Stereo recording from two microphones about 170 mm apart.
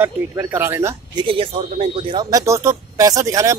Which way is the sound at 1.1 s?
30° right (ahead or behind).